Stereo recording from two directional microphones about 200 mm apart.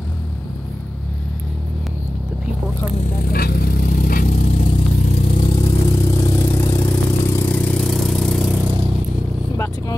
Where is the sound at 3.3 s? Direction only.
50° left (ahead or behind).